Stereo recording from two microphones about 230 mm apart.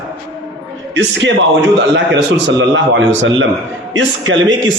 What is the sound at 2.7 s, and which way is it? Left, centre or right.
A man's voice, right.